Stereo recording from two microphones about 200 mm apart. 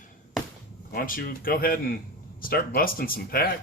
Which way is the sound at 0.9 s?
45° left (ahead or behind).